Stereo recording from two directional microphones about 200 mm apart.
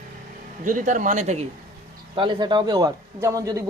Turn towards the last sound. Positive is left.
turn(degrees=-15)  # may be behind; listen again after turning